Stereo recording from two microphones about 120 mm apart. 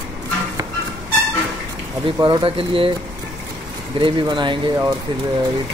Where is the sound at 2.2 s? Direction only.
45° right (ahead or behind).